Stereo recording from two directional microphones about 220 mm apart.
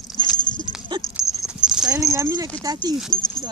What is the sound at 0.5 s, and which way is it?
Dog, 20° left (ahead or behind).